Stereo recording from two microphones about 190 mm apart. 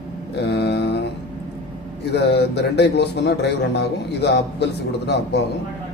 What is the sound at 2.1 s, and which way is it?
Speech, 60° left (ahead or behind).